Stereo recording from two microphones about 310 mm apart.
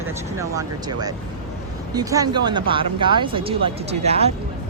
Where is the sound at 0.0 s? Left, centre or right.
Centre.